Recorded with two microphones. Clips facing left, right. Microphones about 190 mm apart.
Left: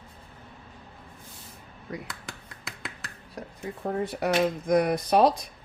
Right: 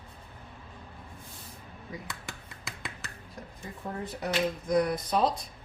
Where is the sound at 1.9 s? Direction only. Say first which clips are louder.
Left 5 dB; 65° left (ahead or behind).